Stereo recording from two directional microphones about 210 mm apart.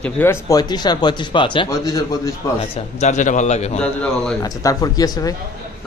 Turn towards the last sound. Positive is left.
turn(degrees=15)  # may be behind; listen again after turning